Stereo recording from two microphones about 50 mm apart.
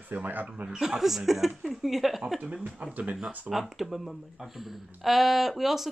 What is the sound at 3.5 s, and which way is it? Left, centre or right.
Speech, centre.